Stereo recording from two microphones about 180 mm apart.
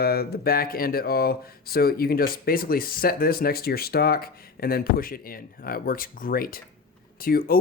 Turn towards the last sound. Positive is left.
turn(degrees=55)  # may be behind; listen again after turning